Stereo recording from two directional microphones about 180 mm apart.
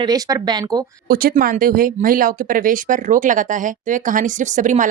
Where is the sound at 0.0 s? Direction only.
20° right (ahead or behind).